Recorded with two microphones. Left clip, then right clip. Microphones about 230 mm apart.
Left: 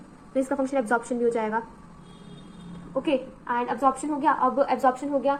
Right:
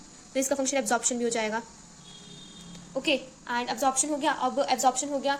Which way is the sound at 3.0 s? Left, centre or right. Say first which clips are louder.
Left 1 dB; right.